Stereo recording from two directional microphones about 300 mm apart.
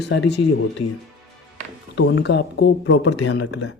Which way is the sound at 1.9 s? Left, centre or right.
Left.